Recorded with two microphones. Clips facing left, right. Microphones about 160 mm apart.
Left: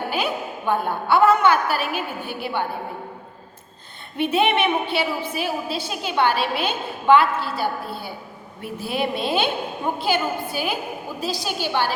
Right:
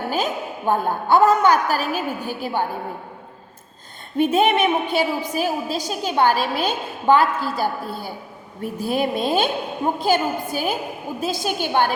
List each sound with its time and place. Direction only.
0.1 s a woman's voice: 40° right (ahead or behind)
4.2 s a woman's voice: 45° right (ahead or behind)